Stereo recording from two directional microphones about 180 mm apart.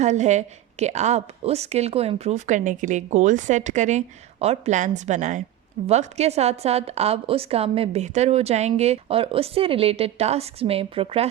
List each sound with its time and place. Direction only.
0.0 s a woman's voice: 40° right (ahead or behind)